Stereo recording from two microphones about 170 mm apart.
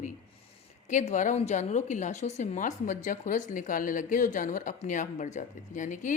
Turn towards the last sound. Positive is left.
turn(degrees=50)  # may be behind; listen again after turning